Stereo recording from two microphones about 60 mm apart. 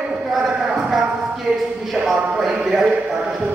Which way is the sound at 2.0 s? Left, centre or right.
Centre.